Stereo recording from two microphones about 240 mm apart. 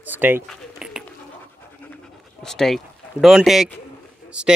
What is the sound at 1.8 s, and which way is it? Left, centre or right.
Pant, centre.